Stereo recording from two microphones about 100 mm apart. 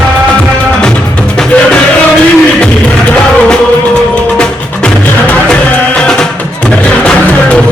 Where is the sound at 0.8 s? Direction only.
10° left (ahead or behind).